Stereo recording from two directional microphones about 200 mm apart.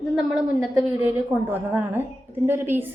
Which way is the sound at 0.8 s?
10° right (ahead or behind).